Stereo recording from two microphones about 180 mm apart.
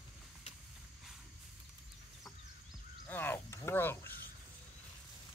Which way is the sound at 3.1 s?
10° left (ahead or behind).